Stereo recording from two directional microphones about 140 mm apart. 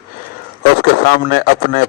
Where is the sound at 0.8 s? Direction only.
90° left.